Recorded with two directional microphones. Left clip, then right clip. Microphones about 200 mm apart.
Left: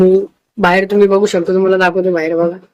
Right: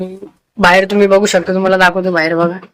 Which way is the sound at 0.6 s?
5° right (ahead or behind).